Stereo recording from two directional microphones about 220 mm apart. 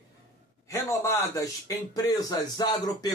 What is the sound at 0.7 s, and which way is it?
Speech, 15° left (ahead or behind).